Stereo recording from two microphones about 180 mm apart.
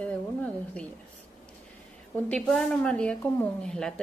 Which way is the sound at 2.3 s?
5° left (ahead or behind).